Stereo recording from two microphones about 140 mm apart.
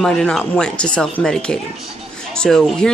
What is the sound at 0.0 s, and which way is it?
Speech, 5° left (ahead or behind).